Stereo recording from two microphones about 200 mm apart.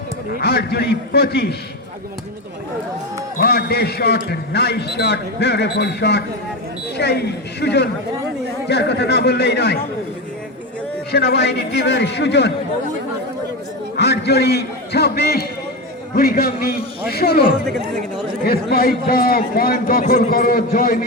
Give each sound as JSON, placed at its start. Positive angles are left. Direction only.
{"t": 0.3, "sound": "a man's voice", "side_deg": 50}
{"t": 3.3, "sound": "a man's voice", "side_deg": 50}
{"t": 11.1, "sound": "a man's voice", "side_deg": 55}
{"t": 13.9, "sound": "a man's voice", "side_deg": 55}
{"t": 17.7, "sound": "speech", "side_deg": 0}
{"t": 18.4, "sound": "a man's voice", "side_deg": 50}